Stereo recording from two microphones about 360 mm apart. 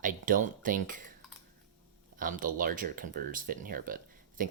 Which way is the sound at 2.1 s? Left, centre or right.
Right.